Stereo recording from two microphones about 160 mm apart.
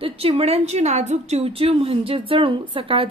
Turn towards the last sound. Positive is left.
turn(degrees=-35)  # may be behind; listen again after turning